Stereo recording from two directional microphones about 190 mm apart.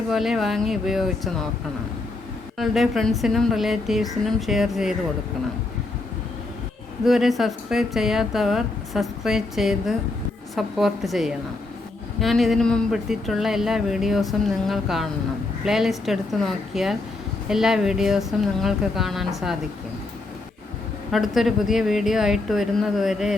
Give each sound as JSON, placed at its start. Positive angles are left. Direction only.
{"t": 0.1, "sound": "speech", "side_deg": 0}
{"t": 2.6, "sound": "speech", "side_deg": 0}
{"t": 7.0, "sound": "speech", "side_deg": 0}
{"t": 21.1, "sound": "speech", "side_deg": 0}